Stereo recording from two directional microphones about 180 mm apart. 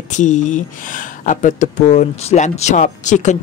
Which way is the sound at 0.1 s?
45° left (ahead or behind).